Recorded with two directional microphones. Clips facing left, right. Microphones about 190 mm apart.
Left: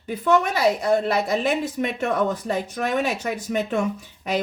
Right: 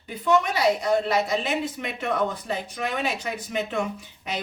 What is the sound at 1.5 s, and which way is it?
Speech, 45° left (ahead or behind).